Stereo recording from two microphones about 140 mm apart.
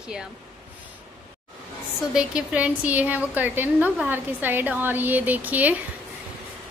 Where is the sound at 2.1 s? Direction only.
10° right (ahead or behind).